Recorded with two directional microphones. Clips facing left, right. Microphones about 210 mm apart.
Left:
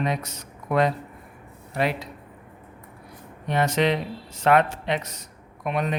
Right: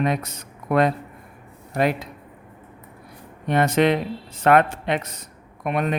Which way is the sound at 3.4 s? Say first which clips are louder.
Right 4 dB; 55° right (ahead or behind).